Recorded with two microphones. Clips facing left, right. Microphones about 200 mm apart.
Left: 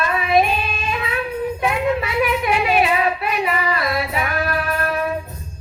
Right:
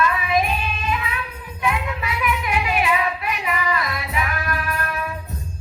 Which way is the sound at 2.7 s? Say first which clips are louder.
Left 4 dB; 30° left (ahead or behind).